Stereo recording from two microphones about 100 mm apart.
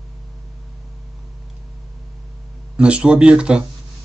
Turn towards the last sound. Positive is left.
turn(degrees=-10)  # may be behind; listen again after turning